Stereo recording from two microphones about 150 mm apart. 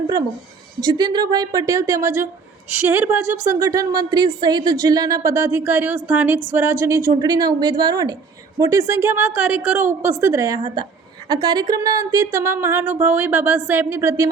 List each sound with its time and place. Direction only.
0.8 s speech: 25° right (ahead or behind)